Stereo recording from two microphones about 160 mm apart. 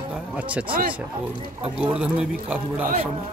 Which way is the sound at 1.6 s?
5° right (ahead or behind).